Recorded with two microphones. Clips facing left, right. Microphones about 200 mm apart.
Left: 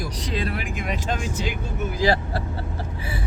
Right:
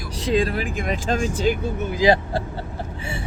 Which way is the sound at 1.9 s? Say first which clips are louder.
Right 4 dB; 20° right (ahead or behind).